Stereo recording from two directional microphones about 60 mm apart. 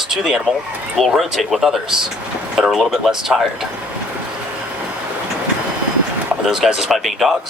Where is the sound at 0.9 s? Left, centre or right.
Centre.